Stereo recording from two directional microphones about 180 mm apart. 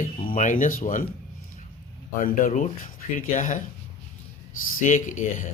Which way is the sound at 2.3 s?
40° left (ahead or behind).